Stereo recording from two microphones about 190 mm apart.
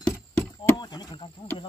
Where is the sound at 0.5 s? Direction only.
20° left (ahead or behind).